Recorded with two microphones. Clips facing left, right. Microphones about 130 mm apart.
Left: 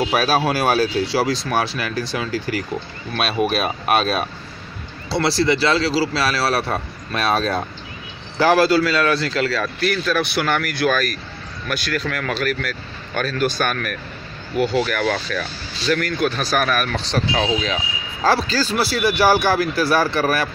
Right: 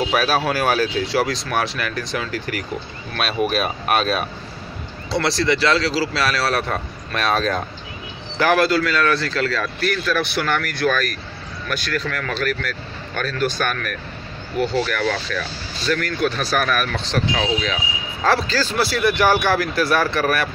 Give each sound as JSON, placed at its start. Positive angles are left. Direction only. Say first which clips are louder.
{"t": 0.1, "sound": "speech", "louder": "left 1 dB", "side_deg": 30}
{"t": 5.1, "sound": "speech", "louder": "left 2 dB", "side_deg": 15}
{"t": 5.9, "sound": "speech", "louder": "left 1 dB", "side_deg": 30}
{"t": 9.5, "sound": "a man's voice", "louder": "left 1 dB", "side_deg": 5}
{"t": 17.1, "sound": "speech", "louder": "left 1 dB", "side_deg": 25}
{"t": 18.3, "sound": "speech", "louder": "even", "side_deg": 10}
{"t": 19.9, "sound": "speech", "louder": "left 1 dB", "side_deg": 35}